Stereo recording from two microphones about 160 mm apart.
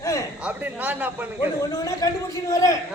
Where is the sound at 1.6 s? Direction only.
20° left (ahead or behind).